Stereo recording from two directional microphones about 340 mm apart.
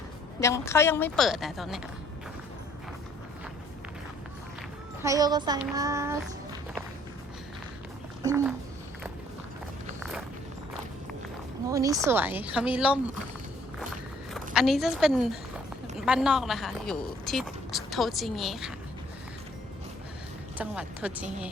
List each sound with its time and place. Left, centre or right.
0.3 s a woman's voice: centre
5.0 s child singing: centre
8.2 s child singing: centre
11.7 s a woman's voice: centre
14.3 s a woman's voice: centre
20.6 s a woman's voice: centre